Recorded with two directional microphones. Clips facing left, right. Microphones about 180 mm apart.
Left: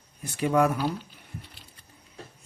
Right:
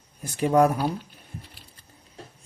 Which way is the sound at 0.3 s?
40° right (ahead or behind).